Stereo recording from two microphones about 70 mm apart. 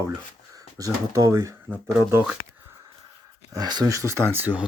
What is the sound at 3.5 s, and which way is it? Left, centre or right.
Speech, right.